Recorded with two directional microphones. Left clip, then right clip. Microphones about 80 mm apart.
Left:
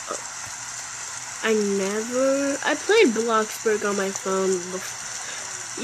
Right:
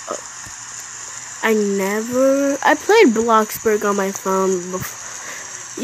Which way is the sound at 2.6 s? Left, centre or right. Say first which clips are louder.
Right 6 dB; right.